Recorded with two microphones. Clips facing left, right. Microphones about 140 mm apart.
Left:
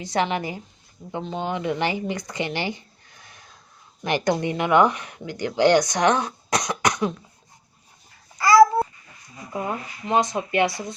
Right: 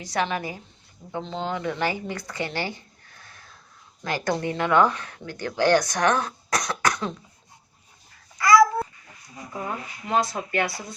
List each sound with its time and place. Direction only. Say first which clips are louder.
0.0 s speech: left 3 dB; 25° left (ahead or behind)
1.1 s speech: left 2 dB; 15° left (ahead or behind)
8.4 s babbling: left 2 dB; 30° left (ahead or behind)
9.5 s speech: left 4 dB; 15° left (ahead or behind)